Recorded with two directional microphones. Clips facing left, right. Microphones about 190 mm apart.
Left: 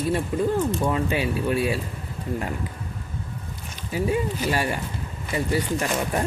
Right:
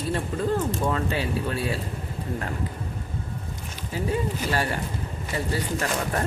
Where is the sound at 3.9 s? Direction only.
15° left (ahead or behind).